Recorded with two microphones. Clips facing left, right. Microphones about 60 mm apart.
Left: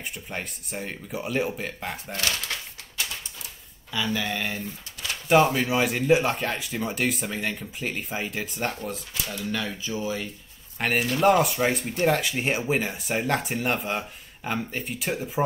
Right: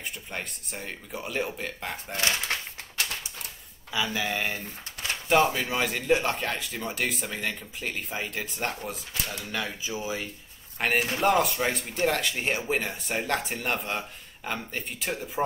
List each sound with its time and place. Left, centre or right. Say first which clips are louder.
0.3 s speech: left 4 dB; centre
2.1 s speech: right 2 dB; right
3.9 s speech: left 1 dB; centre
5.3 s speech: left 3 dB; centre
10.8 s speech: left 2 dB; centre